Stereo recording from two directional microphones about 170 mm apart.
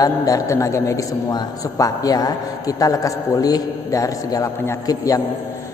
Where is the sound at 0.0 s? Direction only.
20° left (ahead or behind).